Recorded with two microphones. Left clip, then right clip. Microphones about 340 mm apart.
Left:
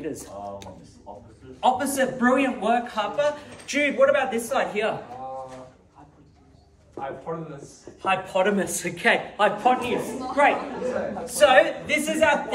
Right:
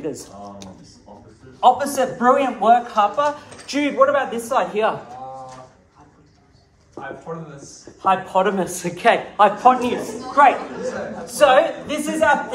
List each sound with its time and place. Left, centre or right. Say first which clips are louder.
0.0 s a man's voice: right 3 dB; right
8.0 s speech: right 5 dB; centre; by 10.5 s right
11.3 s a man's voice: right 3 dB; centre